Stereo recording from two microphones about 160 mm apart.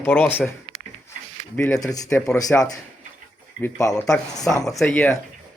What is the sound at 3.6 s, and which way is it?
Speech, 20° left (ahead or behind).